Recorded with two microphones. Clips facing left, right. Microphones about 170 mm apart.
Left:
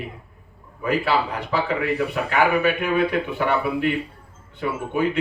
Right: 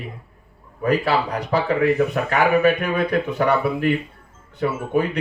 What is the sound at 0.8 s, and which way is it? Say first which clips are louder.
Speech: right 2 dB; 40° right (ahead or behind).